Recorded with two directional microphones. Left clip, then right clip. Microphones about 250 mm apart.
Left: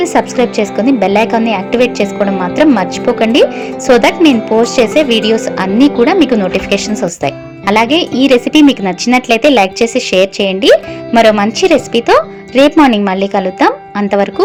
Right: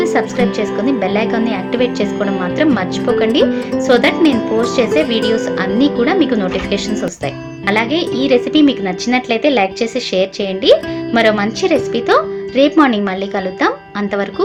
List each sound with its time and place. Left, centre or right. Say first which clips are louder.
0.0 s a woman's voice: left 4 dB; left